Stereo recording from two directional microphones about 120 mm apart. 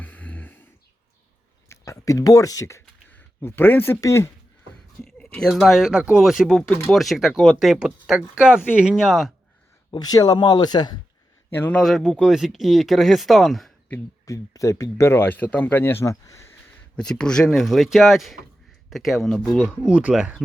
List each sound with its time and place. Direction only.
0.0 s a sound: 15° left (ahead or behind)
1.7 s speech: 25° left (ahead or behind)
5.0 s speech: 5° left (ahead or behind)
9.9 s speech: 30° left (ahead or behind)
11.5 s a man's voice: 15° left (ahead or behind)
11.8 s speech: centre (ahead or behind)
14.3 s speech: 25° left (ahead or behind)
16.9 s speech: 5° left (ahead or behind)